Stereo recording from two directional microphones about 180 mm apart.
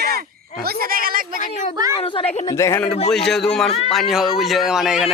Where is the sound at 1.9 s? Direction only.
30° left (ahead or behind).